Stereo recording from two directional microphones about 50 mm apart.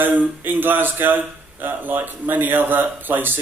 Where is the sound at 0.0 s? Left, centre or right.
Right.